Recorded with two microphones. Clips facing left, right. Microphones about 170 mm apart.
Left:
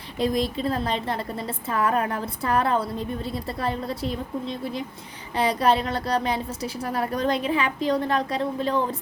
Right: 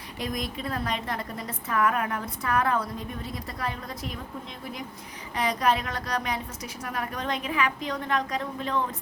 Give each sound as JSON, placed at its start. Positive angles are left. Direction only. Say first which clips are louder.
{"t": 0.2, "sound": "a woman's voice", "louder": "left 8 dB", "side_deg": 30}